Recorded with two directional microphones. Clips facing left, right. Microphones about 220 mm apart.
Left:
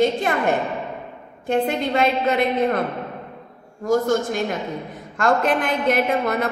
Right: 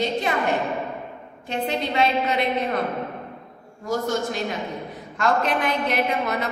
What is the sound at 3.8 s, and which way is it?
A woman's voice, 50° left (ahead or behind).